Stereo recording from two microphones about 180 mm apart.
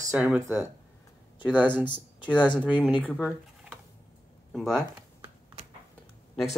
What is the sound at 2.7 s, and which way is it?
Speech, 10° right (ahead or behind).